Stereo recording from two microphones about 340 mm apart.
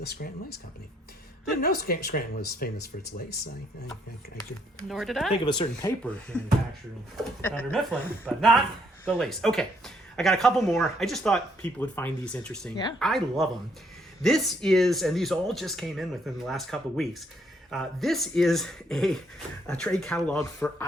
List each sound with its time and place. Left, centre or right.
0.0 s speech: left
1.6 s speech: left
4.8 s speech: centre
5.3 s speech: centre
7.4 s speech: centre